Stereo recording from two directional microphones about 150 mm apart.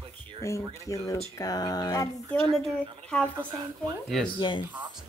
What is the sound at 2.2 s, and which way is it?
Speech, 5° left (ahead or behind).